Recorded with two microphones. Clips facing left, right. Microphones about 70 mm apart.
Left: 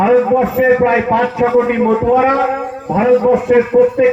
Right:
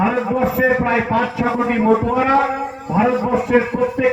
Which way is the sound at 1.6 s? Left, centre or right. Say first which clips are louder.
Left 7 dB; left.